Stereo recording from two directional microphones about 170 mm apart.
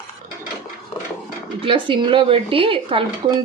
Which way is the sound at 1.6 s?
30° right (ahead or behind).